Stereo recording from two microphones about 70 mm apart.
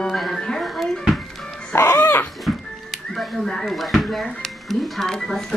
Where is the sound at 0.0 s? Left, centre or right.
Centre.